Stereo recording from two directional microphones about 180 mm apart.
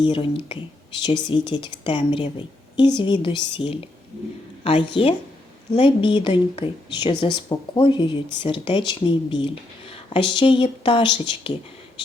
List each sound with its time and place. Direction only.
0.0 s speech: 25° left (ahead or behind)